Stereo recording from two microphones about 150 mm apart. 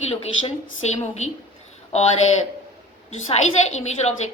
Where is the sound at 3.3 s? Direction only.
45° left (ahead or behind).